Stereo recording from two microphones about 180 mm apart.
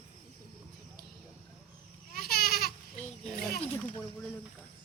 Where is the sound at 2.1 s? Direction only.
55° left (ahead or behind).